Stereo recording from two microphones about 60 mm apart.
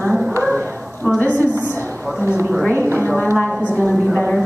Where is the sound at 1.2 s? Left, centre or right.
Left.